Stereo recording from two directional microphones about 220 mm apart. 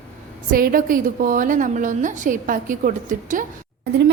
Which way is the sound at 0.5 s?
40° right (ahead or behind).